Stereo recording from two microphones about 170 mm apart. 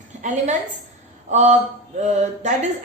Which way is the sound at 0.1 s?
45° right (ahead or behind).